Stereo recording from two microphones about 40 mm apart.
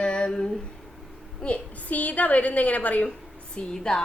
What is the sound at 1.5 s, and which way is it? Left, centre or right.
A woman's voice, left.